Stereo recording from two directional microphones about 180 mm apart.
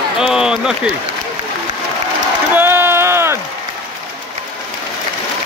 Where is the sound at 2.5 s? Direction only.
10° right (ahead or behind).